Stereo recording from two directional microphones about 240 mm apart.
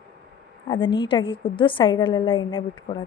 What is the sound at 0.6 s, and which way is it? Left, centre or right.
A woman's voice, left.